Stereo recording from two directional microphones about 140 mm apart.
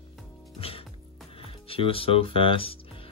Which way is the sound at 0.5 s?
45° left (ahead or behind).